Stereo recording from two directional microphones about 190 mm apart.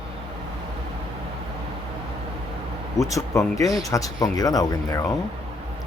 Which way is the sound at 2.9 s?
15° left (ahead or behind).